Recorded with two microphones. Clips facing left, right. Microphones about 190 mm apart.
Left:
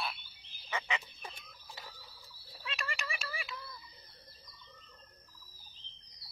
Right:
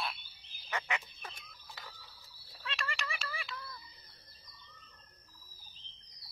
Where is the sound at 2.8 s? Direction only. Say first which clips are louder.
Even; 15° left (ahead or behind).